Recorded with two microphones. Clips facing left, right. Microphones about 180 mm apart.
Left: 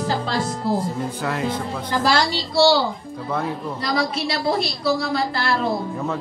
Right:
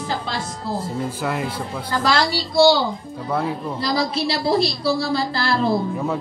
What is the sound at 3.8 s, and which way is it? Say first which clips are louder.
A woman's voice: right 1 dB; 30° right (ahead or behind).